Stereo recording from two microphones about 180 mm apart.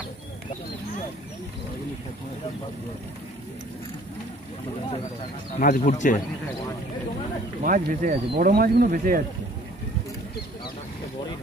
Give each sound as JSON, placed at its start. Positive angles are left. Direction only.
{"t": 5.6, "sound": "speech", "side_deg": 45}
{"t": 7.6, "sound": "speech", "side_deg": -50}